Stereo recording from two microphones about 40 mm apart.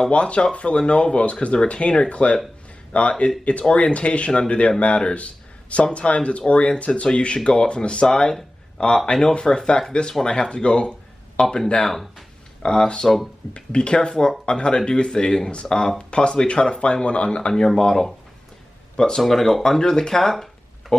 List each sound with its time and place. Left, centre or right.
0.1 s a man's voice: left
11.4 s speech: centre
19.2 s speech: centre